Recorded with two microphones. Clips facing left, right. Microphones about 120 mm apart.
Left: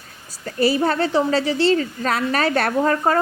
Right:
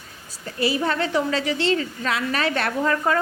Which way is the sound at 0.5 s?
35° left (ahead or behind).